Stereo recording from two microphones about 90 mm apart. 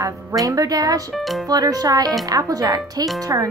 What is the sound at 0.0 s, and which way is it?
A woman's voice, 40° right (ahead or behind).